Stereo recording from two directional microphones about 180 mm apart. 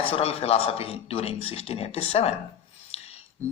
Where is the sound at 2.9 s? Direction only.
35° left (ahead or behind).